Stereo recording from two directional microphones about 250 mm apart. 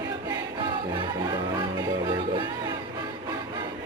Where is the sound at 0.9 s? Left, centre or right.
Centre.